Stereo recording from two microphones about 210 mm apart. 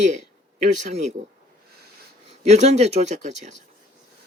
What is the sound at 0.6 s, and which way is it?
Speech, 35° right (ahead or behind).